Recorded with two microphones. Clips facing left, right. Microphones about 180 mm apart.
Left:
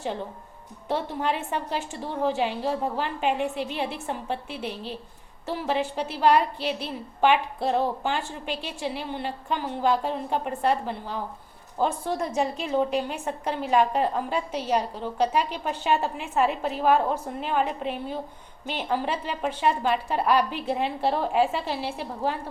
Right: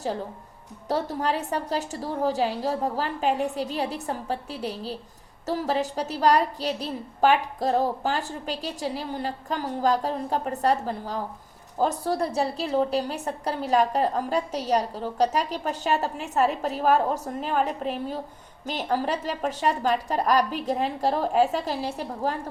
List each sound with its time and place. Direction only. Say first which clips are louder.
0.9 s a woman's voice: right 1 dB; 40° right (ahead or behind)